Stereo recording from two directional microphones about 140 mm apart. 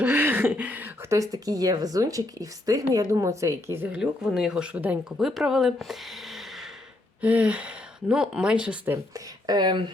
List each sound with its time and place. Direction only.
0.0 s a sound: 15° right (ahead or behind)
1.2 s speech: 25° right (ahead or behind); by 9.0 s 10° right (ahead or behind)
9.1 s speech: 30° right (ahead or behind)